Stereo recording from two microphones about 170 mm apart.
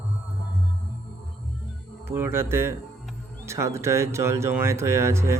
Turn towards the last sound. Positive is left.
turn(degrees=-15)  # may be behind; listen again after turning